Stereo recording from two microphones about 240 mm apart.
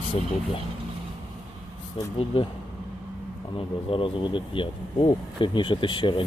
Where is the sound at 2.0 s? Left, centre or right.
Left.